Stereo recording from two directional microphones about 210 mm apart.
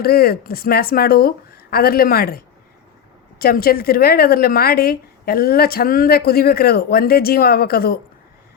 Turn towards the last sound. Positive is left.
turn(degrees=45)  # may be behind; listen again after turning